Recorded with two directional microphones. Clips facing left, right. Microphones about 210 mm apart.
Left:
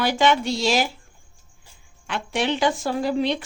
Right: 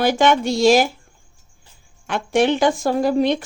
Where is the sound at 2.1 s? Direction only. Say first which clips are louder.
Right 7 dB; 50° right (ahead or behind).